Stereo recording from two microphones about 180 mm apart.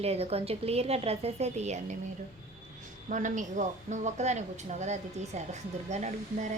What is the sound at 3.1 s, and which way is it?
A woman's voice, 45° right (ahead or behind).